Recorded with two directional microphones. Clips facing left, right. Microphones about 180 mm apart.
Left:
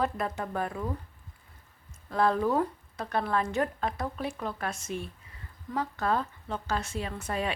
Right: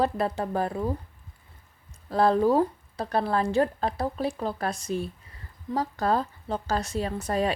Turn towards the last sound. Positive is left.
turn(degrees=-40)  # may be behind; listen again after turning